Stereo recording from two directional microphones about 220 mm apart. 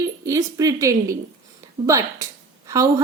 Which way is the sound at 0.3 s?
15° right (ahead or behind).